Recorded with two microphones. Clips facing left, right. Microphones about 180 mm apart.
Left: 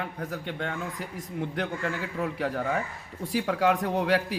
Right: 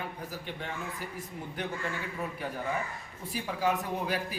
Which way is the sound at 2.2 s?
70° left (ahead or behind).